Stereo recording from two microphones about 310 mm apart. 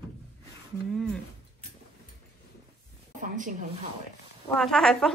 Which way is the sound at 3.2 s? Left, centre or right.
Right.